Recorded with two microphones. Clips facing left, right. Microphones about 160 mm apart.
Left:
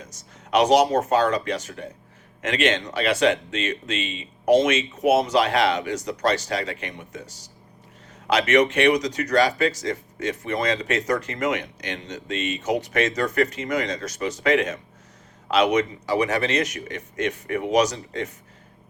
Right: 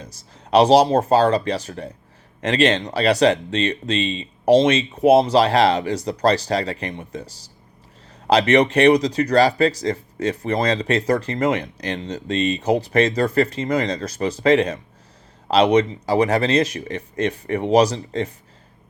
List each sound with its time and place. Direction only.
0.0 s speech: 30° right (ahead or behind)